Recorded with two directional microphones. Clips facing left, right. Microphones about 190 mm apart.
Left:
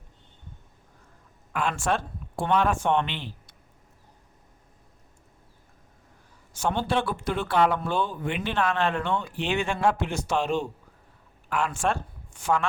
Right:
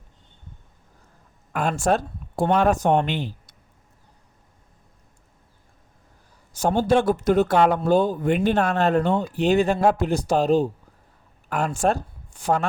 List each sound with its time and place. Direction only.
1.5 s speech: 40° right (ahead or behind)
6.6 s speech: 40° right (ahead or behind)